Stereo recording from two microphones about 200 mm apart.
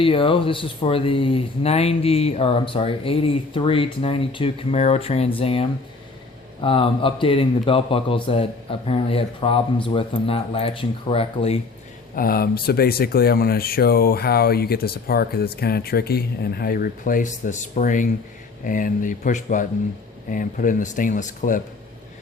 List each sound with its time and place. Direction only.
0.0 s speech: 25° left (ahead or behind)
12.1 s speech: 45° left (ahead or behind)